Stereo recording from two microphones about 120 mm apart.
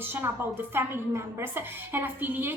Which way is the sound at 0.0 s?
20° right (ahead or behind).